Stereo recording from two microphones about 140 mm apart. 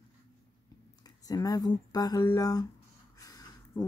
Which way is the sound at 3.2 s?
25° left (ahead or behind).